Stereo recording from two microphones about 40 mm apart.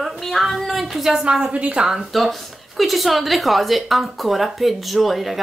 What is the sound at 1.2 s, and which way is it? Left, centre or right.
Speech, right.